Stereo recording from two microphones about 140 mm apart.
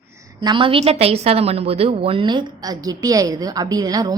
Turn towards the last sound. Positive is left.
turn(degrees=-25)  # may be behind; listen again after turning